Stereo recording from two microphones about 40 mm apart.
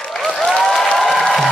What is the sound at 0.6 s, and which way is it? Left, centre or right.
Applause, centre.